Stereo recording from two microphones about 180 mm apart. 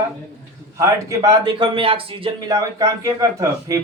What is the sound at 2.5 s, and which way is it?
Speech, 20° right (ahead or behind).